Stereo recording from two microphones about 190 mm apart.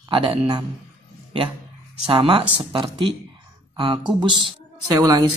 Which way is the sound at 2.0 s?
30° right (ahead or behind).